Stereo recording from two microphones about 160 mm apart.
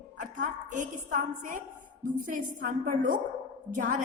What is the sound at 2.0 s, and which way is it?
A woman's voice, 55° right (ahead or behind).